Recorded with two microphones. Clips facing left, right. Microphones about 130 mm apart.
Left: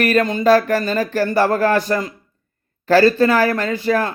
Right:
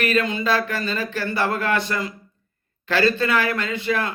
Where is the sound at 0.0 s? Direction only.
45° left (ahead or behind).